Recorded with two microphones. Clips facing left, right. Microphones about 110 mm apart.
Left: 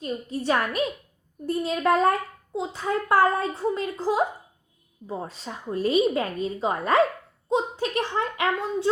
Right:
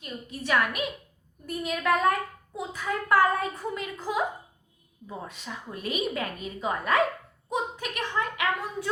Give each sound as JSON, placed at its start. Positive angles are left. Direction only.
{"t": 0.0, "sound": "a woman's voice", "side_deg": 30}